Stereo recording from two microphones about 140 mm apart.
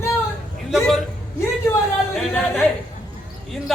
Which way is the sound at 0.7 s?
Centre (ahead or behind).